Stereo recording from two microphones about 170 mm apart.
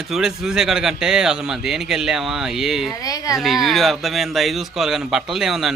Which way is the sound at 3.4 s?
Centre (ahead or behind).